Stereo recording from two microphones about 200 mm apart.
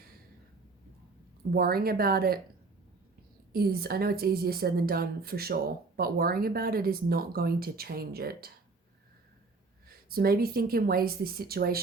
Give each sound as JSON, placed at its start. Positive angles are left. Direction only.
{"t": 1.5, "sound": "speech", "side_deg": -50}
{"t": 3.5, "sound": "speech", "side_deg": -50}
{"t": 10.1, "sound": "speech", "side_deg": -50}